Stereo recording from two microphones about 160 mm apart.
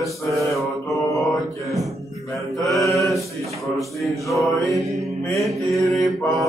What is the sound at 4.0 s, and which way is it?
Music, centre (ahead or behind).